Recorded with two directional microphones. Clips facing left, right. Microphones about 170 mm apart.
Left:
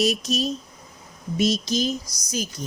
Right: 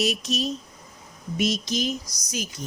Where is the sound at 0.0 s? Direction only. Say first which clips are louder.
Left 3 dB; 35° left (ahead or behind).